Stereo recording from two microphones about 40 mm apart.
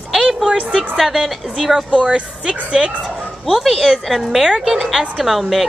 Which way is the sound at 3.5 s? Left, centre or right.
Centre.